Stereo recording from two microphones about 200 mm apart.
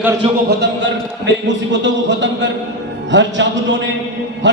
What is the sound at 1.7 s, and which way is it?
Speech, 65° right (ahead or behind).